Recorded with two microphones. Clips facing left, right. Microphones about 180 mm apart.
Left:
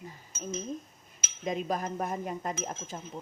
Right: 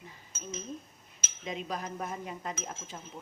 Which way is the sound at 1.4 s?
45° left (ahead or behind).